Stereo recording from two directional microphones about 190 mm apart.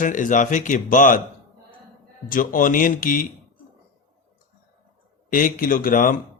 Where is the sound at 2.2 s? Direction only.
45° left (ahead or behind).